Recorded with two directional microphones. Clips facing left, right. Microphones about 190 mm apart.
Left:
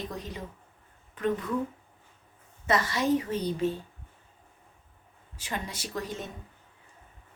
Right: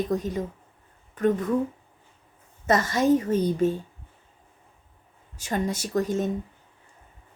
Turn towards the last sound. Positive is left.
turn(degrees=-45)  # may be behind; listen again after turning